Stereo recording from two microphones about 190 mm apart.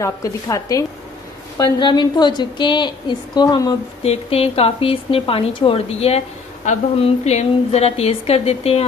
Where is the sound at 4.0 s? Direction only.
30° left (ahead or behind).